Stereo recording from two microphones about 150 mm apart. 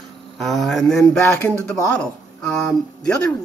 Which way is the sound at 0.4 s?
Centre (ahead or behind).